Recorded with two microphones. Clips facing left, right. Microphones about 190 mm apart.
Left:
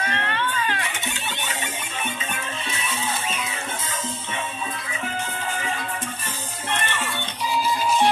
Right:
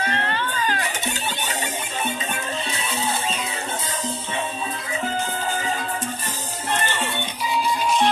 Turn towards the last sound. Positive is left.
turn(degrees=-35)  # may be behind; listen again after turning